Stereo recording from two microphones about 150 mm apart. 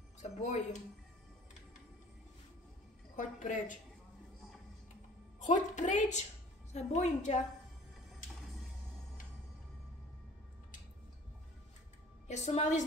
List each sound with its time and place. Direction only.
0.2 s speech: 50° left (ahead or behind)
3.2 s a woman's voice: 60° left (ahead or behind)
5.4 s a woman's voice: 55° left (ahead or behind)
12.3 s a woman's voice: 50° left (ahead or behind)